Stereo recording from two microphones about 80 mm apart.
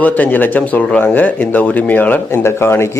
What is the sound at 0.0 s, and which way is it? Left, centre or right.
Speech, left.